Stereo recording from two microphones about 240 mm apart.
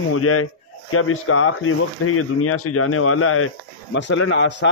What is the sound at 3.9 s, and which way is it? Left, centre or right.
Speech, left.